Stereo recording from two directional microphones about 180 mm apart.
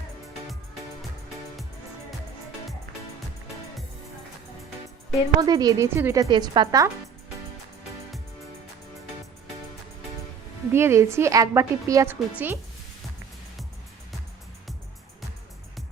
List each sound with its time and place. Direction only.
5.4 s a woman's voice: 20° right (ahead or behind)
10.7 s a woman's voice: 15° right (ahead or behind)